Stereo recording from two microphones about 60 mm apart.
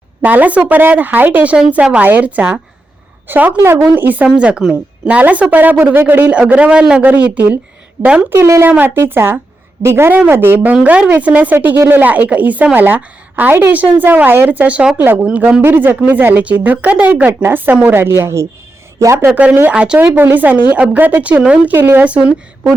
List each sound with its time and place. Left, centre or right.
0.2 s a woman's voice: right
3.6 s a woman's voice: right
3.9 s a woman's voice: right
4.4 s a woman's voice: centre
6.3 s a woman's voice: centre
8.3 s a woman's voice: right
8.6 s a woman's voice: right
9.0 s a woman's voice: right
11.1 s a woman's voice: right
14.9 s a woman's voice: right
19.3 s a woman's voice: centre
20.1 s a woman's voice: right
21.8 s speech: right
22.0 s a woman's voice: right